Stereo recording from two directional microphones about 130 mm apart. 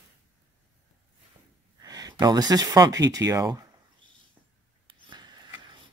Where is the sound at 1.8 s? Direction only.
30° right (ahead or behind).